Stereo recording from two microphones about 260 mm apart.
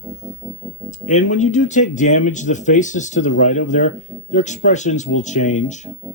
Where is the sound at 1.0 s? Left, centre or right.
Left.